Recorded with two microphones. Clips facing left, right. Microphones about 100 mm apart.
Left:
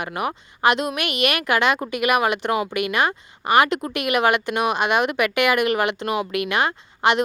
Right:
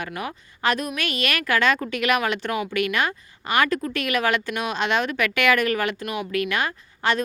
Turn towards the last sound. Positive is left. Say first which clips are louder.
# left 4 dB
turn(degrees=20)  # may be behind; listen again after turning